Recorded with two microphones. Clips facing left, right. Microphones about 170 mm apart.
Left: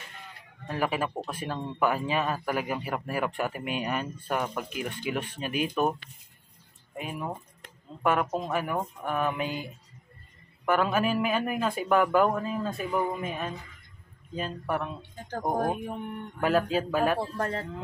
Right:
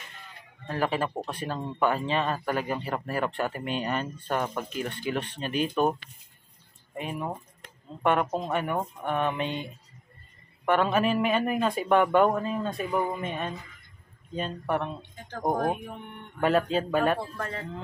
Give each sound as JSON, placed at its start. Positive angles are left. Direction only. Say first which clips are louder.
{"t": 0.7, "sound": "speech", "louder": "right 1 dB", "side_deg": 10}
{"t": 7.0, "sound": "speech", "louder": "right 2 dB", "side_deg": 0}
{"t": 16.3, "sound": "speech", "louder": "right 1 dB", "side_deg": 0}
{"t": 17.2, "sound": "speech", "louder": "left 4 dB", "side_deg": 35}